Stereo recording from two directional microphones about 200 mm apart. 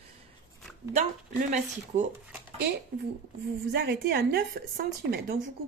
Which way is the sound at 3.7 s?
55° right (ahead or behind).